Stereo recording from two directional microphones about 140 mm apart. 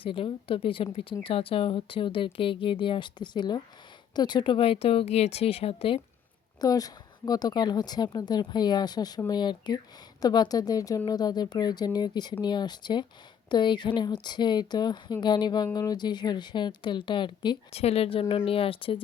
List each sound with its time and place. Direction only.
0.0 s speech: 40° left (ahead or behind)
6.6 s speech: 25° left (ahead or behind)
17.7 s speech: 45° left (ahead or behind)